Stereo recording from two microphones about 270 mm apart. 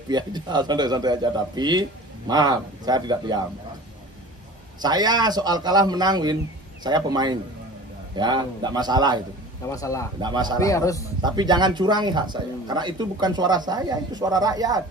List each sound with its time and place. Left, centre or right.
0.1 s speech: centre
4.8 s speech: centre
9.7 s a man's voice: centre
10.2 s speech: centre
10.6 s a man's voice: centre
11.2 s speech: centre